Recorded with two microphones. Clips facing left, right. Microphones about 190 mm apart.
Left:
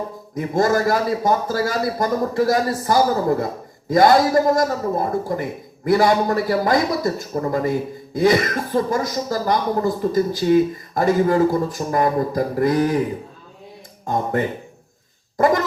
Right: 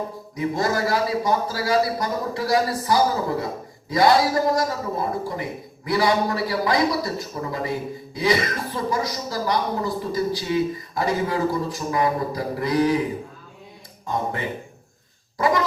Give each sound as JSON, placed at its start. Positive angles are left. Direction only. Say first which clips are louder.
{"t": 0.3, "sound": "speech", "louder": "left 5 dB", "side_deg": 50}
{"t": 15.4, "sound": "cough", "louder": "left 4 dB", "side_deg": 50}